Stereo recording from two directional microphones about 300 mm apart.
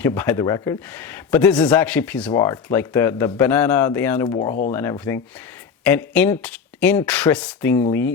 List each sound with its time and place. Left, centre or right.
0.0 s speech: centre
4.3 s speech: left
4.7 s speech: centre